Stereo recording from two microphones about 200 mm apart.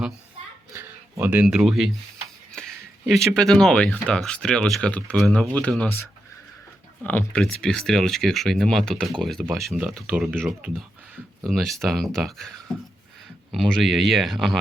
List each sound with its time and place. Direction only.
0.7 s speech: 15° right (ahead or behind)